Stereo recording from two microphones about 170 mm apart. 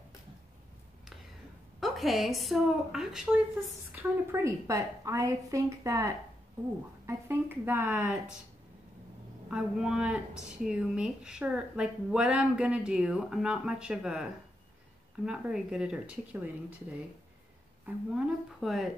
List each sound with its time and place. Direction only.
1.8 s speech: centre (ahead or behind)
3.9 s a woman's voice: 15° right (ahead or behind)
9.5 s speech: 5° right (ahead or behind)
17.8 s speech: 5° right (ahead or behind)